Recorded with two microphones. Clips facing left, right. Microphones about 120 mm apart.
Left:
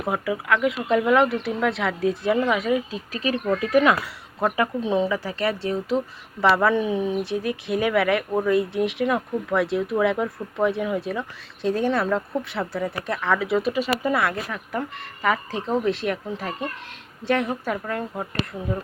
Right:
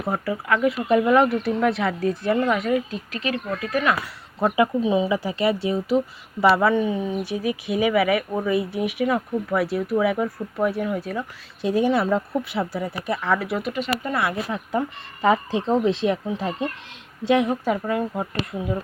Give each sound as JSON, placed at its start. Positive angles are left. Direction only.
{"t": 0.4, "sound": "speech", "side_deg": -5}
{"t": 3.3, "sound": "speech", "side_deg": 20}
{"t": 4.4, "sound": "speech", "side_deg": -5}
{"t": 5.1, "sound": "speech", "side_deg": -15}
{"t": 14.5, "sound": "speech", "side_deg": -25}